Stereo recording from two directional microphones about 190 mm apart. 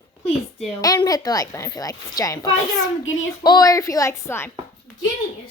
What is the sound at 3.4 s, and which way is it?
Speech, 20° left (ahead or behind).